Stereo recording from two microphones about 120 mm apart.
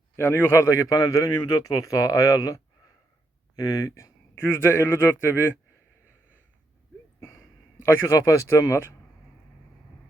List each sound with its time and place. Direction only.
0.2 s a man's voice: 20° left (ahead or behind)
7.8 s a man's voice: 25° left (ahead or behind)